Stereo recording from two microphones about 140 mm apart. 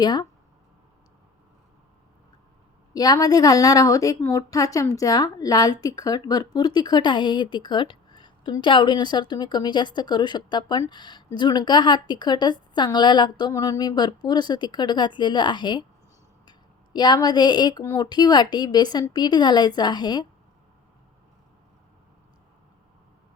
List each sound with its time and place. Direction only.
0.0 s a woman's voice: 30° left (ahead or behind)
2.9 s a woman's voice: 25° left (ahead or behind)